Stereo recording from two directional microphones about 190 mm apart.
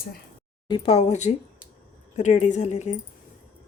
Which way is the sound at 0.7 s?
30° left (ahead or behind).